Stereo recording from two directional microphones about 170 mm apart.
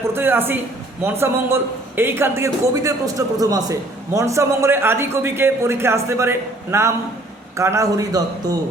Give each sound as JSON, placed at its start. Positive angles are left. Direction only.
{"t": 0.1, "sound": "a man's voice", "side_deg": -10}